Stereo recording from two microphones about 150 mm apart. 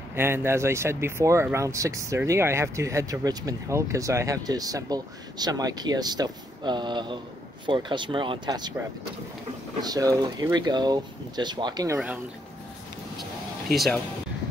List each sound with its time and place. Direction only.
0.1 s speech: 15° right (ahead or behind)
9.8 s speech: 25° right (ahead or behind)